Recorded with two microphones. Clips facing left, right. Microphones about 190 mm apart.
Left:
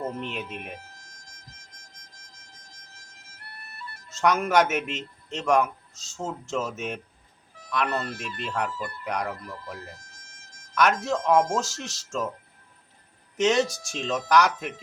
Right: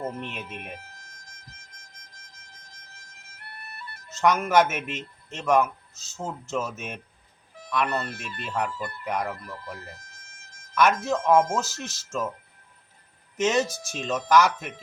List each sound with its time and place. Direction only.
0.3 s a man's voice: centre (ahead or behind)
0.9 s music: 55° right (ahead or behind)
4.2 s a man's voice: centre (ahead or behind)
10.2 s music: 55° right (ahead or behind)
10.8 s a man's voice: 5° right (ahead or behind)
13.3 s a man's voice: centre (ahead or behind)